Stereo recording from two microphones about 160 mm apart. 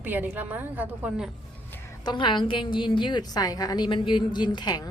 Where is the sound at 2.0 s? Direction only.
30° left (ahead or behind).